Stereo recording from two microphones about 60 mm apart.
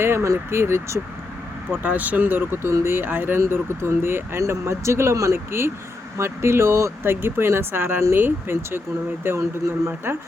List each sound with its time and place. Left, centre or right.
0.0 s speech: right
1.7 s speech: right
2.6 s speech: right